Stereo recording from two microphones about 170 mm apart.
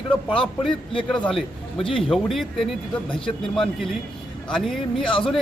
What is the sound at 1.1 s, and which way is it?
A man's voice, 5° left (ahead or behind).